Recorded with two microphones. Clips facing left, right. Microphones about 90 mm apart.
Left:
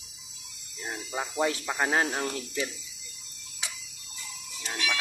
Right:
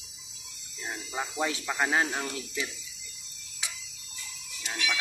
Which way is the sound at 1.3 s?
35° left (ahead or behind).